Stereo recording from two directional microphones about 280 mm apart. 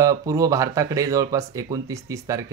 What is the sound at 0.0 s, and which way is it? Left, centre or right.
Speech, centre.